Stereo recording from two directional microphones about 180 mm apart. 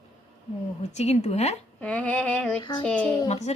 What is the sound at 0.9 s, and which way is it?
Speech, 35° left (ahead or behind).